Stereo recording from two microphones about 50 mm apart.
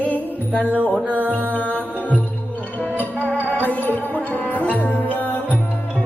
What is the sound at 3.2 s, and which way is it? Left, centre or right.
Music, left.